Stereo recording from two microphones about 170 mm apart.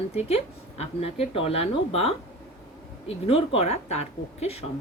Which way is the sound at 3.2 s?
35° left (ahead or behind).